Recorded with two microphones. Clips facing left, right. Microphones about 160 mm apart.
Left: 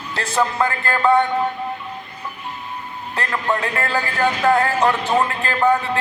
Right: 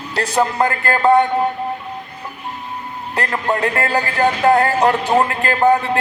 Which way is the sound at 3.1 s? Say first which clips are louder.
Right 2 dB; 40° right (ahead or behind).